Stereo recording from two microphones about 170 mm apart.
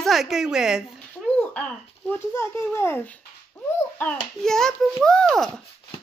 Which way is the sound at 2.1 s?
15° left (ahead or behind).